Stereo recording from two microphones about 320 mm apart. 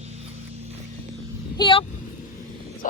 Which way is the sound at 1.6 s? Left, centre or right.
Centre.